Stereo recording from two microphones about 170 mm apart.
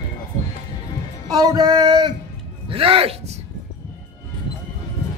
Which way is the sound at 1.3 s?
20° right (ahead or behind).